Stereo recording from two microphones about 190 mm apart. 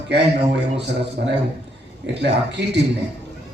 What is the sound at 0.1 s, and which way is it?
A man's voice, 65° right (ahead or behind).